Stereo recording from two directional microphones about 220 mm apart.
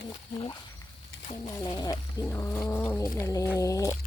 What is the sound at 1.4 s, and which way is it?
Cat, 15° left (ahead or behind).